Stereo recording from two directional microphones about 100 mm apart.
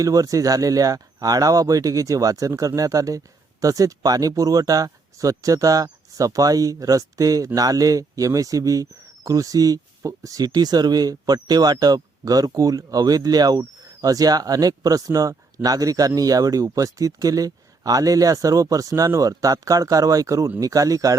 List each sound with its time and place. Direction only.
0.0 s speech: 35° right (ahead or behind)